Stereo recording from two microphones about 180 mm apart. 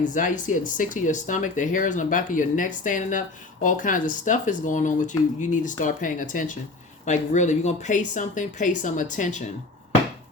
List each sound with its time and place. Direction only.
0.0 s speech: 45° left (ahead or behind)